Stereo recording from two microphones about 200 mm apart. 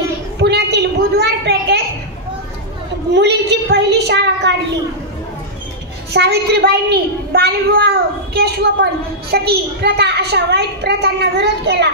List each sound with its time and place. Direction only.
0.4 s a sound: 55° right (ahead or behind)
3.1 s a woman's voice: 55° right (ahead or behind)
6.1 s a woman's voice: 55° right (ahead or behind)